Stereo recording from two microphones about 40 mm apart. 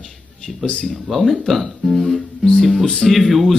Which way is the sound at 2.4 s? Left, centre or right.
Centre.